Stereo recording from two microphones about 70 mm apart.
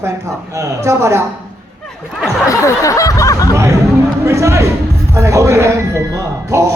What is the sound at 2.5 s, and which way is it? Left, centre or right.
Snicker, left.